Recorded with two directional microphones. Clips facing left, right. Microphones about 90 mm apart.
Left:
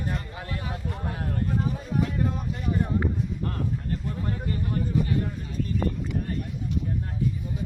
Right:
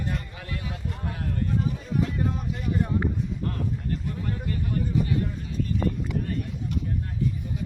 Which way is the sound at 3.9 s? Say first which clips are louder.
Even; 30° left (ahead or behind).